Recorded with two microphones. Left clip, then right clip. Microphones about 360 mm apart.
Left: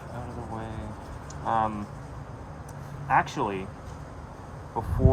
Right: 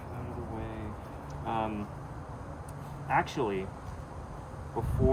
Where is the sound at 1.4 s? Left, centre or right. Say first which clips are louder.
Left 7 dB; centre.